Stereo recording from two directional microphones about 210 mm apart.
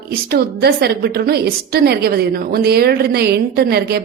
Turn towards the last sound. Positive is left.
turn(degrees=-50)  # may be behind; listen again after turning